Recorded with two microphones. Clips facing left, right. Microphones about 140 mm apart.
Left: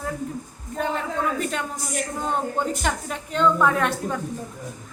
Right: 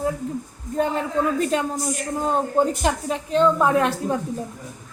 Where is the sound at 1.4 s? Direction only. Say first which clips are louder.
Right 6 dB; 30° right (ahead or behind).